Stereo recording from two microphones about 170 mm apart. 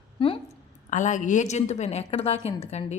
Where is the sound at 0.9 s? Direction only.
45° left (ahead or behind).